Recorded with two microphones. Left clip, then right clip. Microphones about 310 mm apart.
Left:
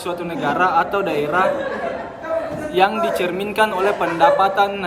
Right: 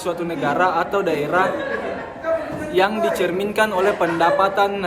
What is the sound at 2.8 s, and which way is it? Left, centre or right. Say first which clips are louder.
A man's voice: left 1 dB; centre.